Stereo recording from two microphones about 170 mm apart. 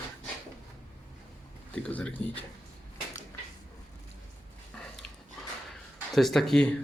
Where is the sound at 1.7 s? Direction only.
5° left (ahead or behind).